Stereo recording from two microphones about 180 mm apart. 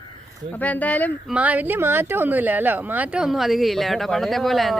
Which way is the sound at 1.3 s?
10° right (ahead or behind).